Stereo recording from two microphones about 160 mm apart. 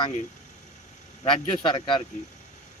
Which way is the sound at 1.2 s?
30° left (ahead or behind).